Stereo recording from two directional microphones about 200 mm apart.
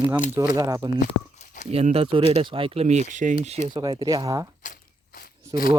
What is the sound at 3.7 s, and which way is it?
Speech, 20° right (ahead or behind).